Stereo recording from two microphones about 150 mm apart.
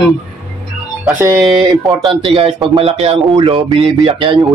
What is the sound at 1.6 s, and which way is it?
Speech, 25° right (ahead or behind).